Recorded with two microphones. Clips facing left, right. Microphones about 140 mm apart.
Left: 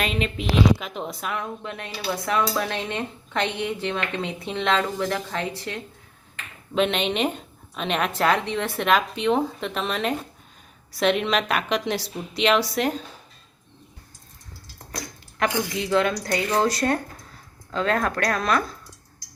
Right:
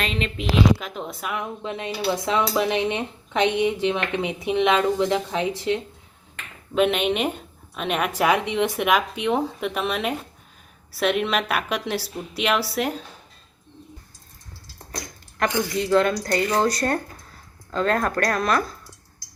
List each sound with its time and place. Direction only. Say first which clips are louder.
0.0 s a woman's voice: left 1 dB; 5° left (ahead or behind)
1.4 s speech: right 2 dB; 20° right (ahead or behind)
6.7 s a woman's voice: right 2 dB; 5° right (ahead or behind)
15.4 s a woman's voice: right 1 dB; 5° left (ahead or behind)